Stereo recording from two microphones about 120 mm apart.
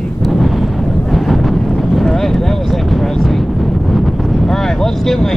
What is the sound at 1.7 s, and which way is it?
Vehicle, centre (ahead or behind).